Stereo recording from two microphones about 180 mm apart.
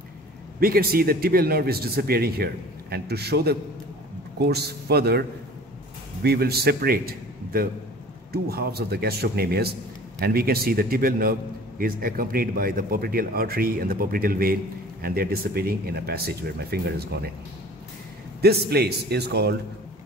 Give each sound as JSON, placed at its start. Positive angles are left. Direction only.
{"t": 0.6, "sound": "speech", "side_deg": -55}
{"t": 6.2, "sound": "speech", "side_deg": -60}
{"t": 18.4, "sound": "speech", "side_deg": -65}